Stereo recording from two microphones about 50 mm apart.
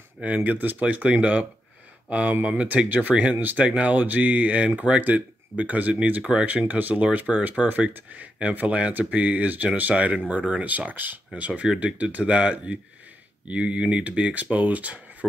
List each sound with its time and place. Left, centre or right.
0.2 s speech: right